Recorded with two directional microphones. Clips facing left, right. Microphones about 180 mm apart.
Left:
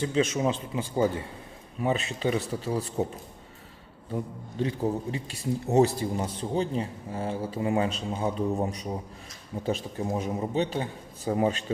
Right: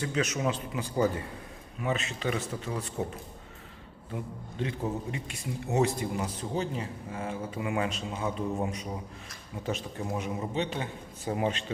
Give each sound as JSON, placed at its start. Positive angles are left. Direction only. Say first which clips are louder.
{"t": 0.0, "sound": "a man's voice", "louder": "left 4 dB", "side_deg": 30}
{"t": 4.6, "sound": "a man's voice", "louder": "left 5 dB", "side_deg": 35}